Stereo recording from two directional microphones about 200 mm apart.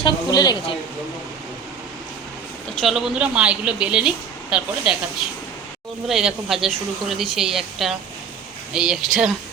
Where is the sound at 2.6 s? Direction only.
Centre (ahead or behind).